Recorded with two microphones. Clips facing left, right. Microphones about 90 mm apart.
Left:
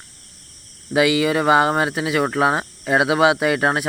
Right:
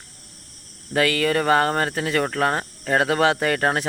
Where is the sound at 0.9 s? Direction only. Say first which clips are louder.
Left 3 dB; 10° left (ahead or behind).